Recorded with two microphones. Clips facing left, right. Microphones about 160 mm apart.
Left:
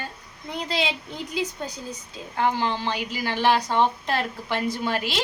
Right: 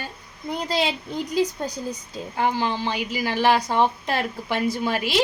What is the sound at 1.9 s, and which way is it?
A woman's voice, 5° right (ahead or behind).